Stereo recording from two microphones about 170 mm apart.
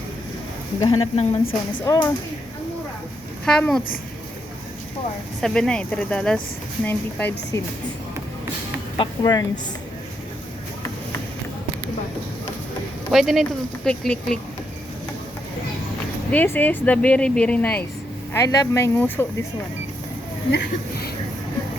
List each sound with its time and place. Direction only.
0.8 s speech: 30° left (ahead or behind)
1.8 s speech: 20° left (ahead or behind)
3.4 s speech: 5° left (ahead or behind)
5.4 s speech: 5° left (ahead or behind)
9.0 s speech: 25° left (ahead or behind)
13.1 s speech: centre (ahead or behind)
16.3 s speech: 10° left (ahead or behind)
18.3 s speech: 20° left (ahead or behind)